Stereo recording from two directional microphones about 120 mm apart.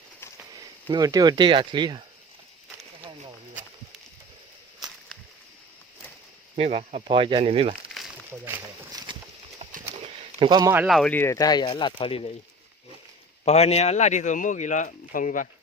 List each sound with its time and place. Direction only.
0.5 s speech: 35° right (ahead or behind)
6.6 s speech: 55° right (ahead or behind)
8.3 s a sound: 20° right (ahead or behind)
8.9 s horse: 35° right (ahead or behind)
10.4 s speech: 35° right (ahead or behind)
10.8 s speech: centre (ahead or behind)
11.1 s speech: 20° left (ahead or behind)
11.3 s speech: 35° left (ahead or behind); by 12.3 s 50° left (ahead or behind)
13.4 s speech: 60° left (ahead or behind); by 15.4 s 90° left